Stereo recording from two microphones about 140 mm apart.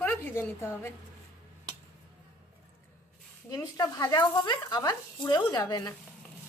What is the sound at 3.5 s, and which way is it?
Speech, 25° left (ahead or behind).